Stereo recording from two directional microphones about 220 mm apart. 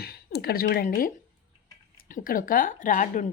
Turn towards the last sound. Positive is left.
turn(degrees=35)  # may be behind; listen again after turning